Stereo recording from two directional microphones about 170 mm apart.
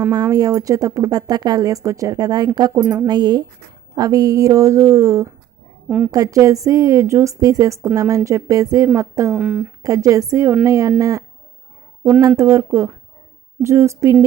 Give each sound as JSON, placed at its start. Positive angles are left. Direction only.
{"t": 0.1, "sound": "speech", "side_deg": -20}
{"t": 2.8, "sound": "a woman's voice", "side_deg": -10}
{"t": 3.1, "sound": "a woman's voice", "side_deg": -25}
{"t": 9.3, "sound": "speech", "side_deg": -5}
{"t": 9.8, "sound": "speech", "side_deg": -20}
{"t": 12.4, "sound": "a woman's voice", "side_deg": -15}